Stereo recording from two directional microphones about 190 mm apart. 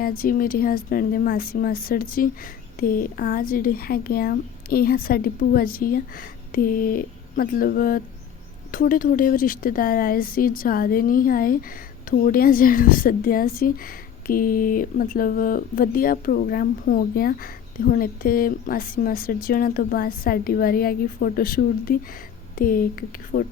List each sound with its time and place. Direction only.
0.0 s a woman's voice: 50° left (ahead or behind)